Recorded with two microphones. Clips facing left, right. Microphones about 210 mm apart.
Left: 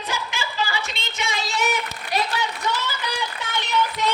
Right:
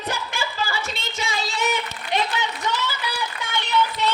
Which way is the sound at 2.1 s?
25° right (ahead or behind).